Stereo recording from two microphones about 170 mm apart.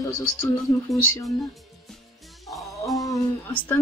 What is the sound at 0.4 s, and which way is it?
Speech, 20° left (ahead or behind).